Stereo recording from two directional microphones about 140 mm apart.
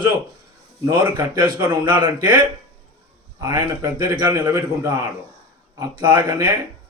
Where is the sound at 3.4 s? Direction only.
25° right (ahead or behind).